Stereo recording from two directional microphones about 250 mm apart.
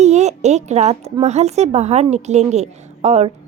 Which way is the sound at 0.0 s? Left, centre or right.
Right.